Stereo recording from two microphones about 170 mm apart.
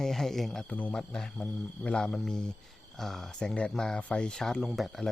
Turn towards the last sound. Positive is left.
turn(degrees=0)  # may be behind; listen again after turning